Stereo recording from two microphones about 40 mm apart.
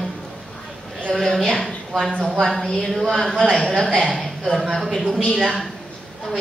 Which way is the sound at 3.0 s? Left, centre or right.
Centre.